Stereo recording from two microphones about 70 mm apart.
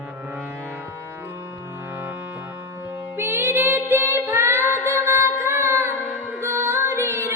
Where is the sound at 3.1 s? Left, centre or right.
Right.